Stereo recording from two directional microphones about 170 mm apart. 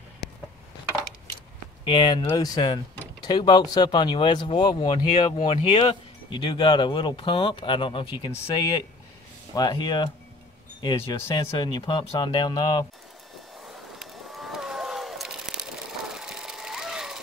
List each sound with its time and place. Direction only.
1.9 s speech: 30° left (ahead or behind)
9.6 s speech: 25° left (ahead or behind)
13.6 s a sound: 5° right (ahead or behind)